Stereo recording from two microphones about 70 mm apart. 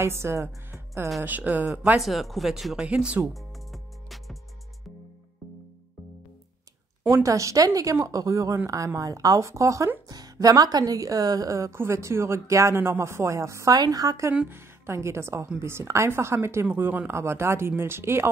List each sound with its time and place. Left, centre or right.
0.0 s a woman's voice: right
1.2 s speech: right
2.0 s speech: centre
3.3 s music: centre
7.2 s a woman's voice: right
10.0 s a woman's voice: right
13.7 s a woman's voice: right
14.5 s a woman's voice: right
16.7 s speech: right